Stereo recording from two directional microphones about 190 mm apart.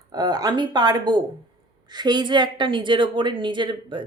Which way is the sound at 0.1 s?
20° right (ahead or behind).